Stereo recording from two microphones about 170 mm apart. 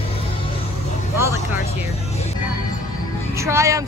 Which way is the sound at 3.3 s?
15° right (ahead or behind).